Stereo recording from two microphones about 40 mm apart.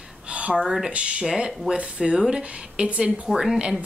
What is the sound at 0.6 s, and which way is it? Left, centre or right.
Speech, centre.